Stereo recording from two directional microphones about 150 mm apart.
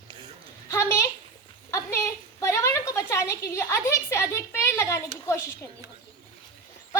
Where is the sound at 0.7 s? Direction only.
20° left (ahead or behind).